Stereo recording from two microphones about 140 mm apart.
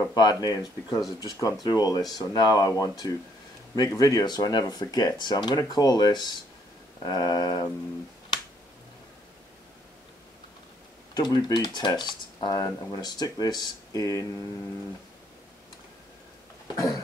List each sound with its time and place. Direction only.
0.1 s speech: 30° left (ahead or behind)
11.1 s speech: 30° left (ahead or behind)
16.7 s speech: 25° left (ahead or behind)